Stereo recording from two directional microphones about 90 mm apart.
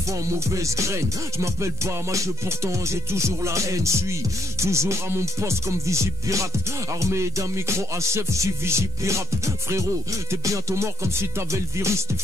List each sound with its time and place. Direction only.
0.6 s music: 35° right (ahead or behind)
2.1 s music: 30° right (ahead or behind)
10.4 s music: 35° right (ahead or behind)